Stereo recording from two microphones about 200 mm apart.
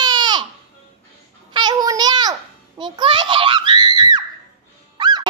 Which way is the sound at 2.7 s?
25° right (ahead or behind).